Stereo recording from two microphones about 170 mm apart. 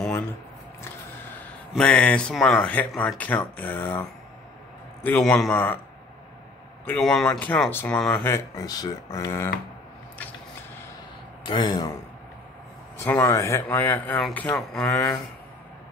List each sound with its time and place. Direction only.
1.7 s speech: 5° left (ahead or behind)
6.9 s speech: centre (ahead or behind)
11.4 s speech: 25° left (ahead or behind)
12.9 s speech: 15° left (ahead or behind)